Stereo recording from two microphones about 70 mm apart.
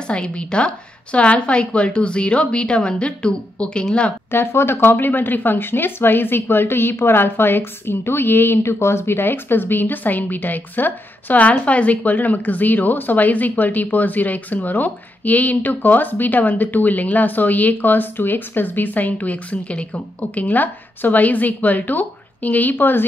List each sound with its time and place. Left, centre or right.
0.1 s a woman's voice: centre
4.3 s speech: left